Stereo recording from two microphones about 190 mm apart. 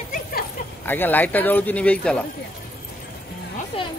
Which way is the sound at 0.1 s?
50° left (ahead or behind).